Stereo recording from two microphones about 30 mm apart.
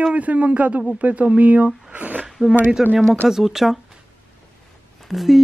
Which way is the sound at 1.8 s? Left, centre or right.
Right.